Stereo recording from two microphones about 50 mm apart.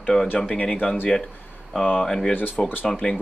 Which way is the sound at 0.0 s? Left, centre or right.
Centre.